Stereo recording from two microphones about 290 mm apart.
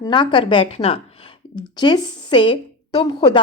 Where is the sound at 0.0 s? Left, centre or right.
Centre.